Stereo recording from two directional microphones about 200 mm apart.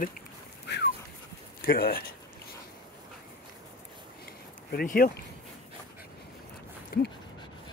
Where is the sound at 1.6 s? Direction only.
50° left (ahead or behind).